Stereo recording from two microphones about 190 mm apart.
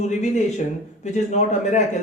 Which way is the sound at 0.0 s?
40° left (ahead or behind).